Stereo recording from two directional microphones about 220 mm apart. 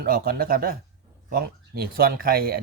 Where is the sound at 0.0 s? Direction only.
40° right (ahead or behind).